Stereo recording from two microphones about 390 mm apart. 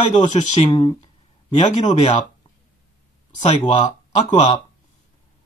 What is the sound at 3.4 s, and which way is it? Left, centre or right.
Speech, centre.